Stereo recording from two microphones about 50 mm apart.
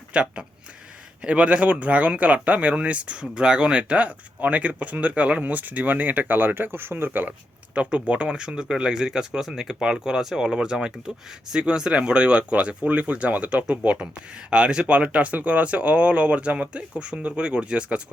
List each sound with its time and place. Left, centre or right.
0.1 s speech: right
7.7 s speech: right